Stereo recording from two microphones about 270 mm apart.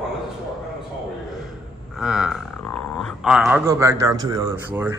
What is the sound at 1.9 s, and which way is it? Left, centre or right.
Roaring cats, centre.